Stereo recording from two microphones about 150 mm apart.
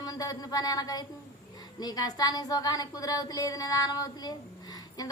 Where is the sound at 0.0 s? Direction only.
25° left (ahead or behind).